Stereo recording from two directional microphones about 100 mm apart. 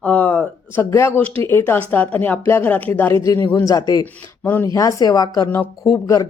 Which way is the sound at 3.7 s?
40° left (ahead or behind).